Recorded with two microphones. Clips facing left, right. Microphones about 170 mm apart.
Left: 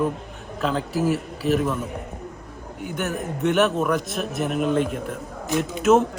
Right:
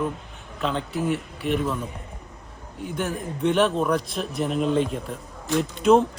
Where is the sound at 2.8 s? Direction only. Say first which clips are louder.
Left 1 dB; 5° left (ahead or behind).